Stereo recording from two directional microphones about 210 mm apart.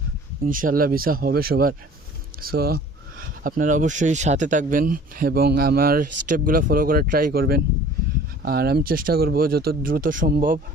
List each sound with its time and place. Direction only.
0.4 s speech: 40° right (ahead or behind)